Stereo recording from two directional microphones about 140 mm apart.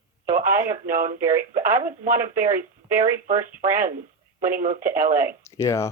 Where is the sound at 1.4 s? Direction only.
75° right (ahead or behind).